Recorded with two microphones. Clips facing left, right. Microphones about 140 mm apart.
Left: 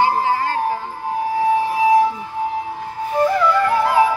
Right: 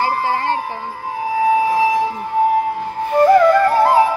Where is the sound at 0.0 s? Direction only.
35° right (ahead or behind).